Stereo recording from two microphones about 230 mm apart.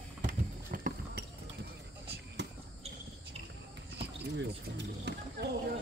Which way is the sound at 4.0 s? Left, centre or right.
Right.